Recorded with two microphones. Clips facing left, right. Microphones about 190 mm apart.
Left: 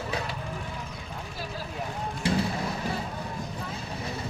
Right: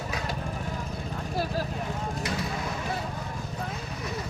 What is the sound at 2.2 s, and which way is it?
Vehicle, 30° left (ahead or behind).